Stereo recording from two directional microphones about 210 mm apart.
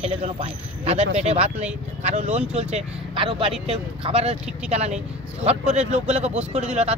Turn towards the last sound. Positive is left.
turn(degrees=-30)  # may be behind; listen again after turning